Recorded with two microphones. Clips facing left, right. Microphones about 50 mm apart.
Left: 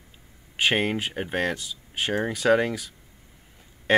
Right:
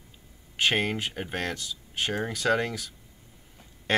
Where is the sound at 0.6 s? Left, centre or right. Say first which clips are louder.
Left 2 dB; centre.